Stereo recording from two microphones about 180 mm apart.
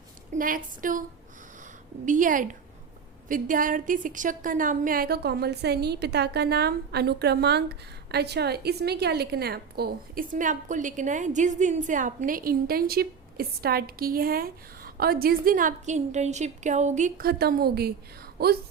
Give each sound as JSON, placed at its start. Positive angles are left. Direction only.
{"t": 0.3, "sound": "a woman's voice", "side_deg": -50}
{"t": 2.0, "sound": "a woman's voice", "side_deg": -45}